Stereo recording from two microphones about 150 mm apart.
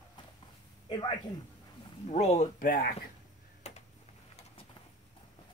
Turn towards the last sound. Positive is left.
turn(degrees=45)  # may be behind; listen again after turning